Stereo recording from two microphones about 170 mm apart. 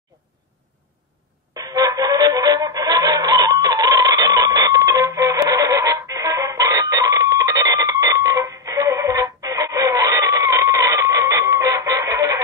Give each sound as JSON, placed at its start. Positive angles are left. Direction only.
{"t": 1.7, "sound": "music", "side_deg": -20}
{"t": 7.7, "sound": "alarm clock", "side_deg": -20}